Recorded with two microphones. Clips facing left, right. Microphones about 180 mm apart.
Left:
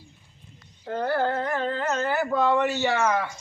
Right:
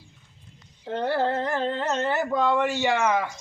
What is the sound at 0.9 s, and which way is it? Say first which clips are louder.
Carnatic music: even; 25° right (ahead or behind).